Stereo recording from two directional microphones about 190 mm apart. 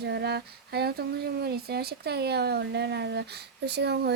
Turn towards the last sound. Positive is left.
turn(degrees=-60)  # may be behind; listen again after turning